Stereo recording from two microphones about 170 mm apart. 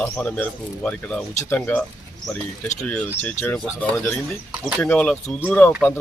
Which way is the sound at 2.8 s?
10° left (ahead or behind).